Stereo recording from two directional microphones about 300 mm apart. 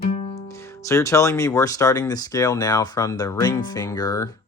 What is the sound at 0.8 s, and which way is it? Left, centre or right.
Speech, centre.